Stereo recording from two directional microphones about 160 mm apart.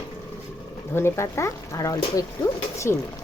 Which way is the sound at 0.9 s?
15° left (ahead or behind).